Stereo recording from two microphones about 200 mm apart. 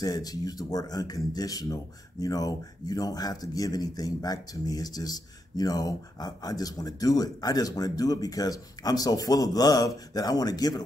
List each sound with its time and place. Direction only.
0.0 s speech: 20° left (ahead or behind)